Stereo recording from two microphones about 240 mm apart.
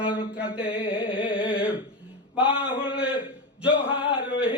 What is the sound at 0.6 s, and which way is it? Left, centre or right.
Speech, left.